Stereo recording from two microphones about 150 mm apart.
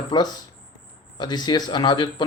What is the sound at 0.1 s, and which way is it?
Speech, 25° left (ahead or behind).